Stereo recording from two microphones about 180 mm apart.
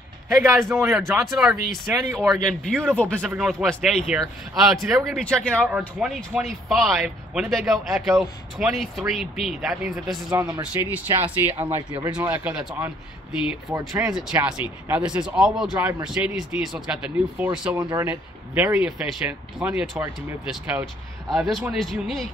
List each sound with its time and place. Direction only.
0.9 s speech: centre (ahead or behind); by 14.1 s 15° right (ahead or behind)
14.1 s speech: 5° right (ahead or behind)
17.7 s speech: 20° right (ahead or behind)
18.0 s speech: 10° right (ahead or behind)